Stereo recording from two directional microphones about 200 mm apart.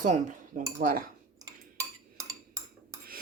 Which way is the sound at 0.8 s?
45° right (ahead or behind).